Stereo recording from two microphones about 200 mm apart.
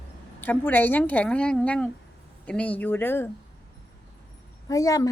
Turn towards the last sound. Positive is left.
turn(degrees=15)  # may be behind; listen again after turning